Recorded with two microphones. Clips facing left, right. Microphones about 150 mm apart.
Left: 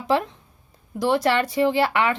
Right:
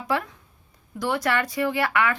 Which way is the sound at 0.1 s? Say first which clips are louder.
Left 5 dB; 25° left (ahead or behind).